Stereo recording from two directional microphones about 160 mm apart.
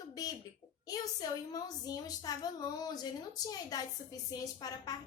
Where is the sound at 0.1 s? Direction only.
25° left (ahead or behind).